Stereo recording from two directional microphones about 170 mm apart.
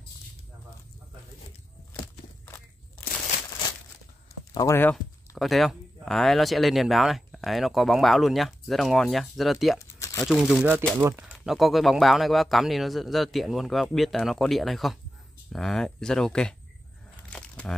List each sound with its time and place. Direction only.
4.6 s a sound: 15° left (ahead or behind)
5.4 s speech: centre (ahead or behind)
9.8 s crumpling: 15° left (ahead or behind)
10.2 s speech: centre (ahead or behind)
11.0 s speech: 15° right (ahead or behind)
11.3 s speech: centre (ahead or behind)
17.3 s a sound: 5° left (ahead or behind)